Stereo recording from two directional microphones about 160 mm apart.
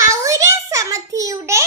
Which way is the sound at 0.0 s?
20° right (ahead or behind).